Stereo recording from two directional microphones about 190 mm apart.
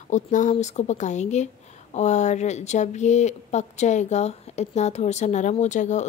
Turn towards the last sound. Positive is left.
turn(degrees=40)  # may be behind; listen again after turning